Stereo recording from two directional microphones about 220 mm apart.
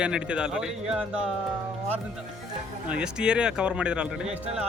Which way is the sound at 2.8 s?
5° right (ahead or behind).